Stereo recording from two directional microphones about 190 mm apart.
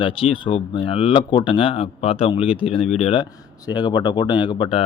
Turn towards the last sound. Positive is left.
turn(degrees=25)  # may be behind; listen again after turning